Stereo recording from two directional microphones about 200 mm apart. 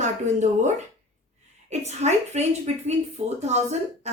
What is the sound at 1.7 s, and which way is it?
A woman's voice, 35° right (ahead or behind).